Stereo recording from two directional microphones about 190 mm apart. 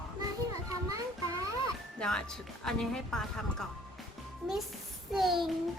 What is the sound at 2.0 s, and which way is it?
A child's voice, 5° left (ahead or behind).